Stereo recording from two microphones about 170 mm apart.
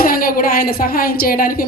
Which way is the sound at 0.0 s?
60° left (ahead or behind).